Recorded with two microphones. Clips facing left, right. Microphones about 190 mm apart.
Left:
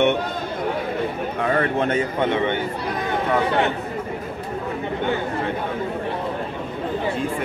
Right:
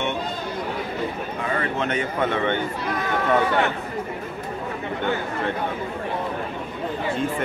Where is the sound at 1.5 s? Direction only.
50° left (ahead or behind).